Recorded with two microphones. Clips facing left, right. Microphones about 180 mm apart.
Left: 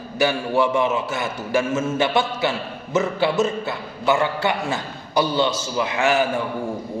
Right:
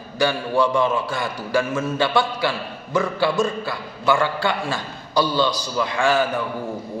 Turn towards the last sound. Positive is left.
turn(degrees=25)  # may be behind; listen again after turning